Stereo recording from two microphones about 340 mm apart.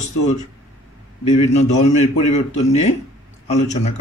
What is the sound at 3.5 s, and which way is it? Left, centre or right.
Speech, centre.